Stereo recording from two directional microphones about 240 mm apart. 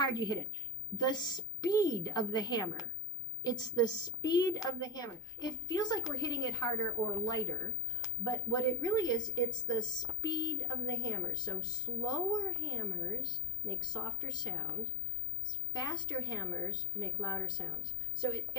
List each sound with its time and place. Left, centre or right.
0.0 s a woman's voice: centre